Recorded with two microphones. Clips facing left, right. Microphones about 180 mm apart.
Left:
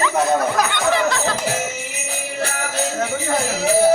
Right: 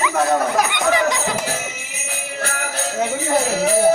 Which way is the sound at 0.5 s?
15° right (ahead or behind).